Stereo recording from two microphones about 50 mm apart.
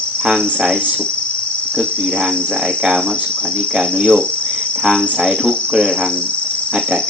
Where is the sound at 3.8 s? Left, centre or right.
Centre.